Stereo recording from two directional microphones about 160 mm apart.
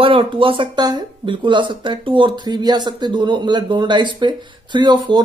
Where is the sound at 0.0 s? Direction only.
35° right (ahead or behind).